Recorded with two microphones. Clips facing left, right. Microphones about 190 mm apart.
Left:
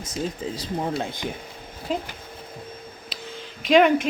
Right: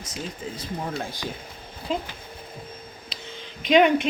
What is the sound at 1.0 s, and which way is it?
Speech, 20° left (ahead or behind).